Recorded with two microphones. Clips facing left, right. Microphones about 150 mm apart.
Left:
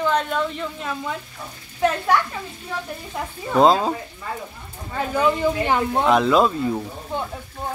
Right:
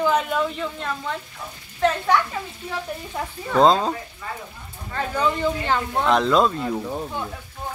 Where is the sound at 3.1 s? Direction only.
5° left (ahead or behind).